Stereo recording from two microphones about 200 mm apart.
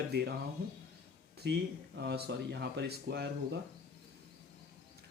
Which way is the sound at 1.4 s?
55° right (ahead or behind).